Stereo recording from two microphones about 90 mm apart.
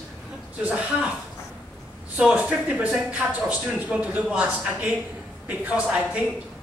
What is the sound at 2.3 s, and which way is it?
Speech, 15° right (ahead or behind).